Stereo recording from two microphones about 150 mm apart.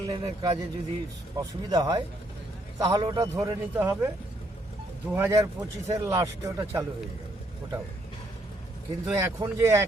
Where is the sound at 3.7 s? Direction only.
15° right (ahead or behind).